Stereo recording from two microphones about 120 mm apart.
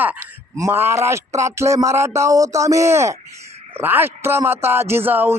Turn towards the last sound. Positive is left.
turn(degrees=-15)  # may be behind; listen again after turning